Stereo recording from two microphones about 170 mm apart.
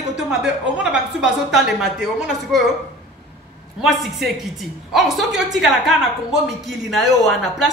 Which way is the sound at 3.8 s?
Centre (ahead or behind).